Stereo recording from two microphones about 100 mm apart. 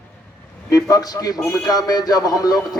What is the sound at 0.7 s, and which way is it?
Speech, 35° left (ahead or behind).